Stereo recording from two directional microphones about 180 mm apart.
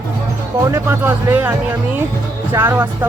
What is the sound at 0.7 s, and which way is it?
Speech, 15° right (ahead or behind).